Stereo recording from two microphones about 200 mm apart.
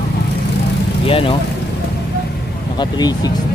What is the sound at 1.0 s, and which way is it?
Speech, 25° left (ahead or behind).